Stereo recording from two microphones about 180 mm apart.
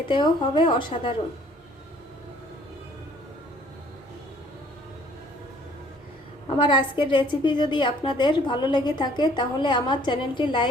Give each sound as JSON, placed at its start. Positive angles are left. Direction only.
{"t": 0.1, "sound": "a woman's voice", "side_deg": 25}
{"t": 6.6, "sound": "a woman's voice", "side_deg": 30}